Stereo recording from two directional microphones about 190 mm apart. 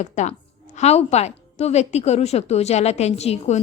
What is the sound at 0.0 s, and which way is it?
A woman's voice, 40° left (ahead or behind).